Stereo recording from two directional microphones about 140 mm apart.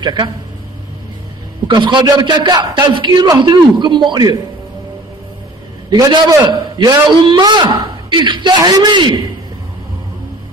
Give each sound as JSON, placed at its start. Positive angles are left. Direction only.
{"t": 0.0, "sound": "speech", "side_deg": -30}
{"t": 1.7, "sound": "a man's voice", "side_deg": -35}
{"t": 5.9, "sound": "a man's voice", "side_deg": -30}